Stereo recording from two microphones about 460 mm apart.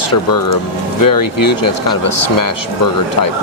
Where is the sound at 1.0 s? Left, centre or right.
Left.